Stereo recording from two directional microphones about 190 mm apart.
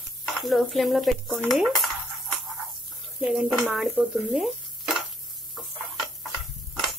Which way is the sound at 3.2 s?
5° right (ahead or behind).